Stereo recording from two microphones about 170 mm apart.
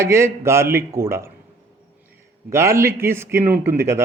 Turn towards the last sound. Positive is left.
turn(degrees=-15)  # may be behind; listen again after turning